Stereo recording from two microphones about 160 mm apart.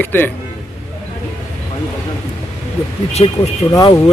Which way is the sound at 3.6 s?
20° left (ahead or behind).